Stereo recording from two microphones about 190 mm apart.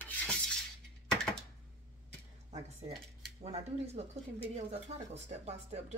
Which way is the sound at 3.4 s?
35° right (ahead or behind).